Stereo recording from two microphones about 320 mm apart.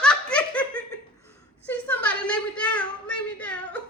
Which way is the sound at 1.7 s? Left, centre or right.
Centre.